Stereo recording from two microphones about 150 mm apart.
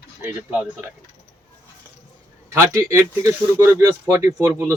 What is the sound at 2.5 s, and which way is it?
Speech, 20° right (ahead or behind).